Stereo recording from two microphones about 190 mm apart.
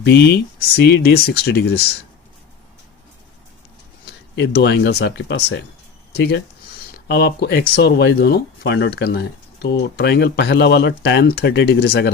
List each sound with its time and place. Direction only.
0.0 s speech: 60° left (ahead or behind)
4.4 s speech: 65° left (ahead or behind)